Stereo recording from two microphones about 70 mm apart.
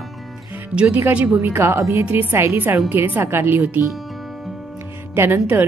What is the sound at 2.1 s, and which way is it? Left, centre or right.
A woman's voice, right.